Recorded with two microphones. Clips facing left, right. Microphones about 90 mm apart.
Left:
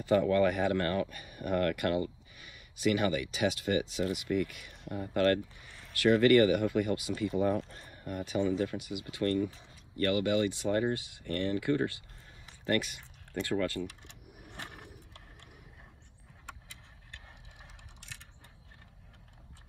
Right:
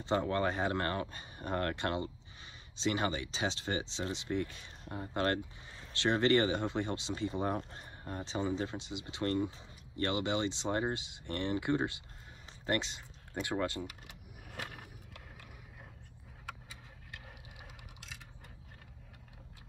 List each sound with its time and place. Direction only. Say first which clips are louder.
0.0 s speech: left 6 dB; 30° right (ahead or behind)